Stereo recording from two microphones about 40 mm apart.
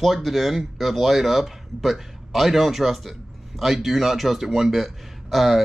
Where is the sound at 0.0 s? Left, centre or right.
Centre.